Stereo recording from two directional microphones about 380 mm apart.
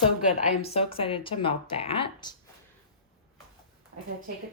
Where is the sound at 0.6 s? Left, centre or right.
Centre.